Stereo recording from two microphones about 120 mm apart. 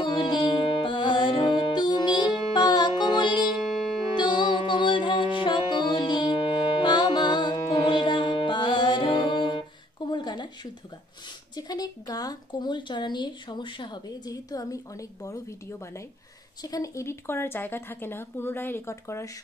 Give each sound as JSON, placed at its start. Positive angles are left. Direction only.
{"t": 0.0, "sound": "music", "side_deg": 40}
{"t": 11.5, "sound": "a woman's voice", "side_deg": 35}